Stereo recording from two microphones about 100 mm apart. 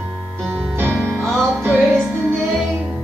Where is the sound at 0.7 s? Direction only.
25° right (ahead or behind).